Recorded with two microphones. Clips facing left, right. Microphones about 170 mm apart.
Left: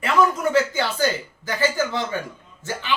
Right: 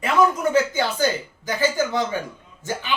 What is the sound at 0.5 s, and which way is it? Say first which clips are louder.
Speech: right 1 dB; 20° right (ahead or behind).